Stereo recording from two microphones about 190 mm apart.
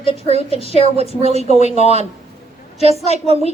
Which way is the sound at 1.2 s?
35° right (ahead or behind).